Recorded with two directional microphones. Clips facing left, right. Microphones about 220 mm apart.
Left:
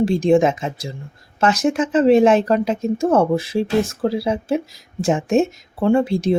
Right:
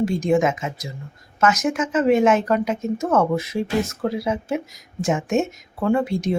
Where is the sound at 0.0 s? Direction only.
30° left (ahead or behind).